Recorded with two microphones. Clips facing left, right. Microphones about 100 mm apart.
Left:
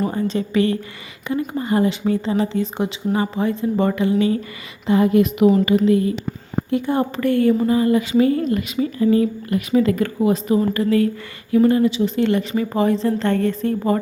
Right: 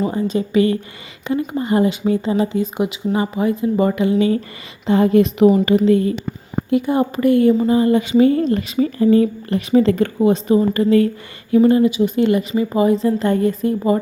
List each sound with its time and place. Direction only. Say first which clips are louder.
0.0 s a woman's voice: right 2 dB; 15° right (ahead or behind)
4.9 s a woman's voice: right 2 dB; 30° right (ahead or behind)
6.7 s a woman's voice: right 3 dB; 15° right (ahead or behind)